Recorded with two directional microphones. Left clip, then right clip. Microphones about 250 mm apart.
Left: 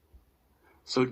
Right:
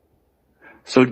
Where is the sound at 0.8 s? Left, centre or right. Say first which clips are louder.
Right 11 dB; right.